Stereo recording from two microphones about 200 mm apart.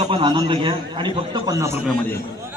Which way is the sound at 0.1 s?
25° right (ahead or behind).